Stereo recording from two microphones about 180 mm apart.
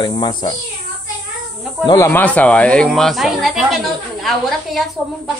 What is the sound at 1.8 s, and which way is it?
Speech, 15° left (ahead or behind).